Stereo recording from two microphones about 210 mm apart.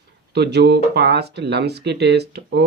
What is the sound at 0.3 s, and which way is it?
Speech, 50° right (ahead or behind).